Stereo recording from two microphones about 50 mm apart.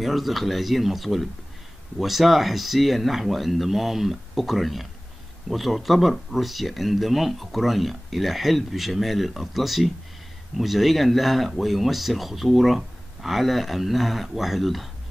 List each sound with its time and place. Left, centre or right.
0.0 s speech: centre